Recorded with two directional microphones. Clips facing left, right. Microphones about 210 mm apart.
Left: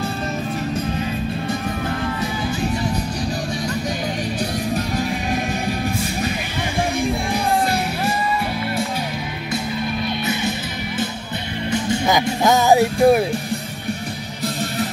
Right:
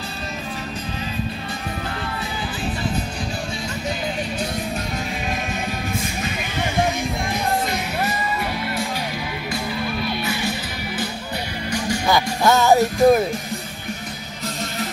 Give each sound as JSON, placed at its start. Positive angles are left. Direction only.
{"t": 10.0, "sound": "music", "side_deg": 20}
{"t": 11.7, "sound": "music", "side_deg": 20}